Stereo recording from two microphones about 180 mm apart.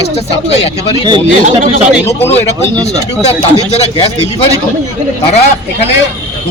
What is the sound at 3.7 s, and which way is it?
Speech, 35° left (ahead or behind).